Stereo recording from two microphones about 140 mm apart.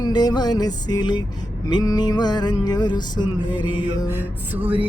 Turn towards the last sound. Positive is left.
turn(degrees=-10)  # may be behind; listen again after turning